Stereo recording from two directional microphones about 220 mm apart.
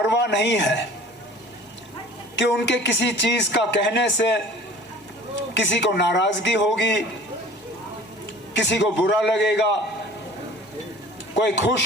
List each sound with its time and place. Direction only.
0.1 s speech: 50° left (ahead or behind)
2.3 s a man's voice: 50° left (ahead or behind)
5.5 s a man's voice: 55° left (ahead or behind)
8.5 s a man's voice: 55° left (ahead or behind)
11.3 s a man's voice: 55° left (ahead or behind)